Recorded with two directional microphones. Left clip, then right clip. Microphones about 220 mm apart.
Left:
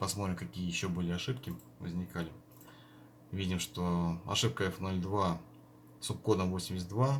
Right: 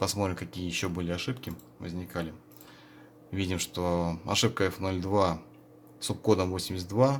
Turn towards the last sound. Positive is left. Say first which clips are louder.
# right 9 dB
turn(degrees=-50)  # may be behind; listen again after turning